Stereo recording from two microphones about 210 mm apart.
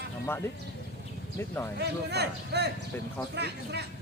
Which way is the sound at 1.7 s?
55° right (ahead or behind).